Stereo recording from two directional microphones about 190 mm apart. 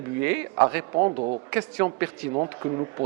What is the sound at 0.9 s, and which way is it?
Speech, 30° right (ahead or behind).